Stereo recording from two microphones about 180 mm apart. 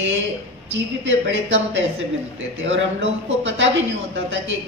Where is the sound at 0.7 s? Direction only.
80° right.